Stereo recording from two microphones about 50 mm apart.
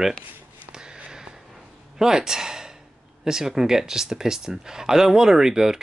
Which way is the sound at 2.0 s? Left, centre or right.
Centre.